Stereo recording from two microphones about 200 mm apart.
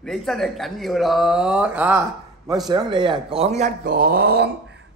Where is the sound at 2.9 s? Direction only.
25° right (ahead or behind).